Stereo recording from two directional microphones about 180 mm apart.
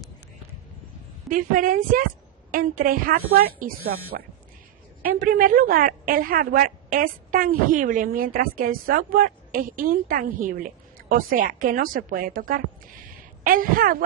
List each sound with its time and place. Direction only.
1.3 s a woman's voice: 50° right (ahead or behind)